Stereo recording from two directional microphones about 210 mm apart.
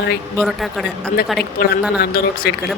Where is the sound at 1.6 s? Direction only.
45° left (ahead or behind).